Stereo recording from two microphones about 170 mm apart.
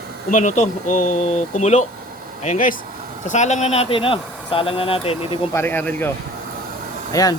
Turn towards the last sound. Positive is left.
turn(degrees=20)  # may be behind; listen again after turning